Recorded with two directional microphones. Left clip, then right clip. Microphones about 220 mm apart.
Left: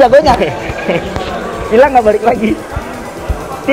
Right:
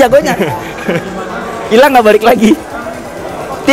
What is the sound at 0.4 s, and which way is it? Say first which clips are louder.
Speech: even; 40° right (ahead or behind).